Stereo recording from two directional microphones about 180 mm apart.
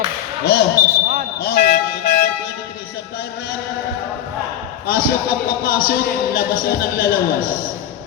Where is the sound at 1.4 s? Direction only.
60° left (ahead or behind).